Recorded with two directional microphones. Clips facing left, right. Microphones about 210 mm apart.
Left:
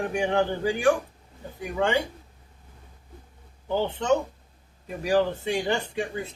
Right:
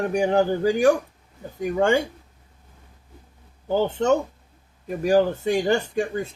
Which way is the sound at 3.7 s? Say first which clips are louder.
Right 4 dB; 45° right (ahead or behind).